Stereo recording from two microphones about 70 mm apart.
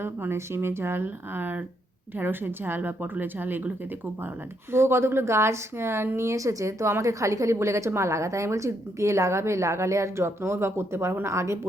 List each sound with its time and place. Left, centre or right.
0.0 s speech: right
4.7 s a woman's voice: right